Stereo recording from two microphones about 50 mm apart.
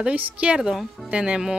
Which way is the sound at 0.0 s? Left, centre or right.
Right.